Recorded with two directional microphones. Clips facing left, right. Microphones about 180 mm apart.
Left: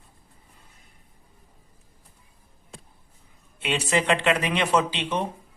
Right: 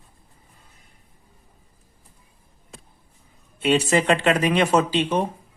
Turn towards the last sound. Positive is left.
turn(degrees=-45)  # may be behind; listen again after turning